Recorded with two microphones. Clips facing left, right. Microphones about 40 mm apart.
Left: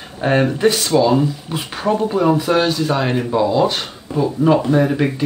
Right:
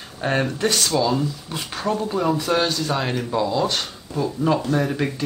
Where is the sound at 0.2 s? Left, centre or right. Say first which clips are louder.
Left 7 dB; centre.